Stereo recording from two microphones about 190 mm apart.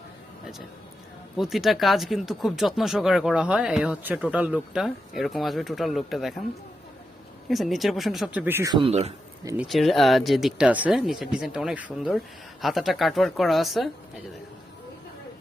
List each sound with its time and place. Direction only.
1.4 s speech: centre (ahead or behind)
7.4 s speech: centre (ahead or behind)
8.7 s speech: 30° right (ahead or behind)
9.6 s speech: centre (ahead or behind)